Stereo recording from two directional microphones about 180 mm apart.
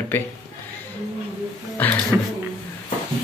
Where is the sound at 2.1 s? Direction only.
10° right (ahead or behind).